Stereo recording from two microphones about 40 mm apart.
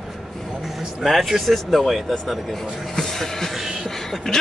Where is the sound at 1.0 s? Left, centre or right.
Centre.